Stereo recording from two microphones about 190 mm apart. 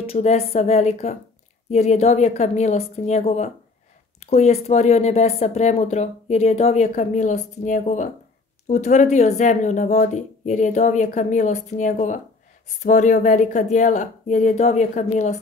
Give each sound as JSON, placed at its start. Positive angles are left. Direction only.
{"t": 0.0, "sound": "speech", "side_deg": 35}